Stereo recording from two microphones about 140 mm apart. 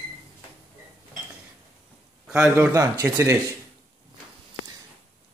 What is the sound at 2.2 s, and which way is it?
Speech, 10° right (ahead or behind).